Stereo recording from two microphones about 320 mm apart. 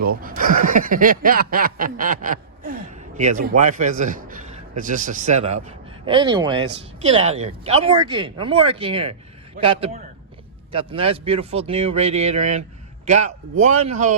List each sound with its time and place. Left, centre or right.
0.2 s speech: right
4.3 s a sound: right
4.8 s speech: right